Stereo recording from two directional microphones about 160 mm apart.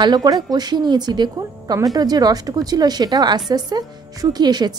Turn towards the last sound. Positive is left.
turn(degrees=-25)  # may be behind; listen again after turning